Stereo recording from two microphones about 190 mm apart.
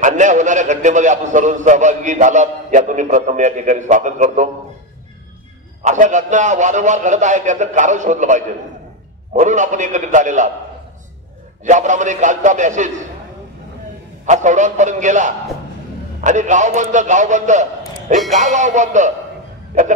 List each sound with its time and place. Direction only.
0.0 s a man's voice: 40° right (ahead or behind)
5.8 s a man's voice: 40° right (ahead or behind)
11.6 s a man's voice: 40° right (ahead or behind)
14.2 s a man's voice: 40° right (ahead or behind)